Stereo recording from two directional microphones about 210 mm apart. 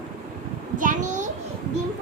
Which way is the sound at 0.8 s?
35° right (ahead or behind).